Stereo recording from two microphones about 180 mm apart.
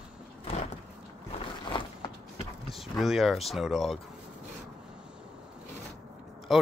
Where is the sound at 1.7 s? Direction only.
25° left (ahead or behind).